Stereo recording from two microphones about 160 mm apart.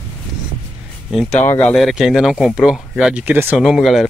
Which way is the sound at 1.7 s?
Centre (ahead or behind).